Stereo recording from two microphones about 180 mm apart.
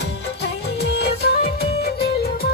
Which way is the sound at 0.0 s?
70° left (ahead or behind).